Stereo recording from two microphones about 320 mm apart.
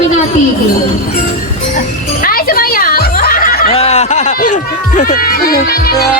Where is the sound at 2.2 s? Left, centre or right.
Left.